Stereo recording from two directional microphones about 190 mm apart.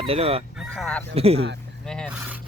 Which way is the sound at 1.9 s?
5° left (ahead or behind).